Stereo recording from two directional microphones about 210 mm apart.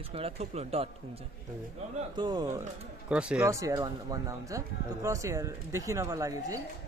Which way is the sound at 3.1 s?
5° right (ahead or behind).